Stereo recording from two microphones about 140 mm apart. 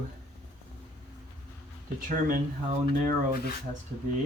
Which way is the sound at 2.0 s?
75° right (ahead or behind).